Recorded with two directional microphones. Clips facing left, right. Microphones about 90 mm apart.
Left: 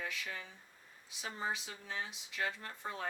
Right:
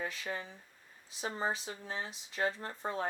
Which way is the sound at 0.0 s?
35° right (ahead or behind).